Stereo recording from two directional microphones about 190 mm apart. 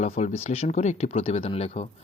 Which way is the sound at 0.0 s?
35° left (ahead or behind).